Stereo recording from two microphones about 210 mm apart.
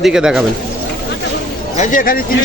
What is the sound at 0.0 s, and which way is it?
Speech, 5° right (ahead or behind).